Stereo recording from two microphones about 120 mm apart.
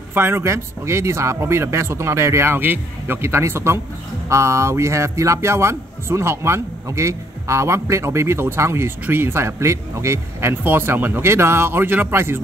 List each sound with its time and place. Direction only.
0.1 s speech: 20° right (ahead or behind)